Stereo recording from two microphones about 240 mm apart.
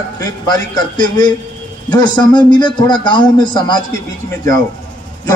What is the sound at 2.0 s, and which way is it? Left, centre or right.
A man's voice, centre.